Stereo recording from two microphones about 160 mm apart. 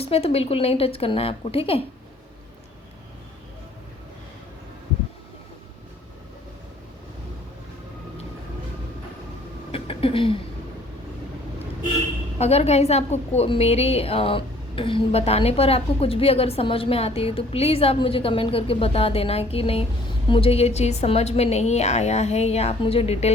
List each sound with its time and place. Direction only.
0.0 s a woman's voice: 40° left (ahead or behind)
9.7 s a sound: 35° left (ahead or behind)
12.4 s a woman's voice: 40° left (ahead or behind)